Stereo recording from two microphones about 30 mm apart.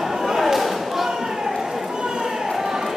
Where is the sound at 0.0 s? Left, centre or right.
Centre.